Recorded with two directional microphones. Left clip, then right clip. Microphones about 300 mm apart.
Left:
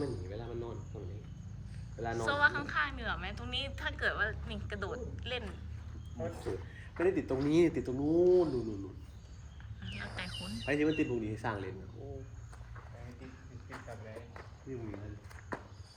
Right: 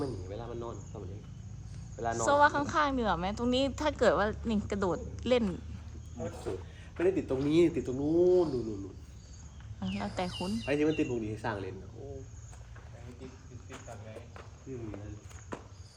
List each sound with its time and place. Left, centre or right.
0.0 s cricket: centre
2.0 s a woman's voice: centre
6.1 s speech: centre
9.8 s speech: centre
13.2 s cricket: centre